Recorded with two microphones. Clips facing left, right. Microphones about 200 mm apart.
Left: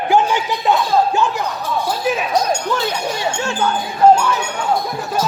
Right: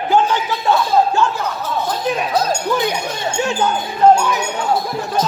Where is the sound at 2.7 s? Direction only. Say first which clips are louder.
Right 1 dB; 15° right (ahead or behind).